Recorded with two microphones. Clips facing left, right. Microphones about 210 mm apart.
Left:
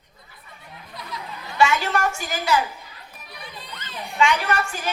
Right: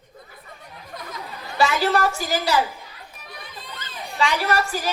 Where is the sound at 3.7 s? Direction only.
35° right (ahead or behind).